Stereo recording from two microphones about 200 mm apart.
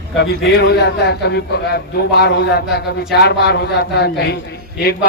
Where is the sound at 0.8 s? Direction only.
55° left (ahead or behind).